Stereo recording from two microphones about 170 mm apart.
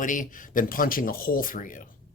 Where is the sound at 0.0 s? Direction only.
50° left (ahead or behind).